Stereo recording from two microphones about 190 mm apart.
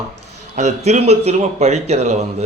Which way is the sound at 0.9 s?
35° right (ahead or behind).